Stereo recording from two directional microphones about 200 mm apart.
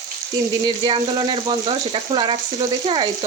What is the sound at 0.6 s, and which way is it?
Speech, 20° right (ahead or behind).